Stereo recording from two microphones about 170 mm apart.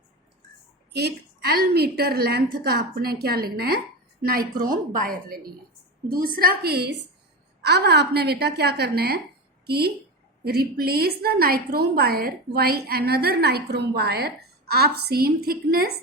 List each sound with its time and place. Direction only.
0.9 s a woman's voice: 70° right (ahead or behind)